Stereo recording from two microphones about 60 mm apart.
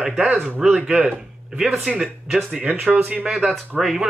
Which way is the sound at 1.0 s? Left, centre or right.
Centre.